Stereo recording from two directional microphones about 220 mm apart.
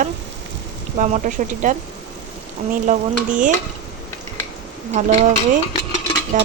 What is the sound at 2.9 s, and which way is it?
Speech, 35° right (ahead or behind).